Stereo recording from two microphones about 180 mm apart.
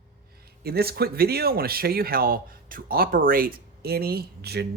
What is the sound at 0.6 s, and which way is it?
Speech, 60° right (ahead or behind).